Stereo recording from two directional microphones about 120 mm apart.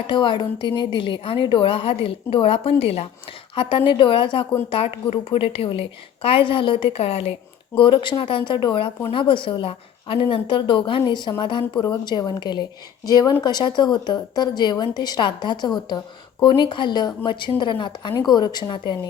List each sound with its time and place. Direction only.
0.1 s a woman's voice: 40° left (ahead or behind)
3.5 s a woman's voice: 45° left (ahead or behind)
7.8 s a woman's voice: 45° left (ahead or behind)